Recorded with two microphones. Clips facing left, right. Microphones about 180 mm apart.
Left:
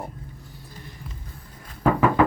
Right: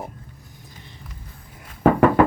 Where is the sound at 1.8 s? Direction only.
60° right (ahead or behind).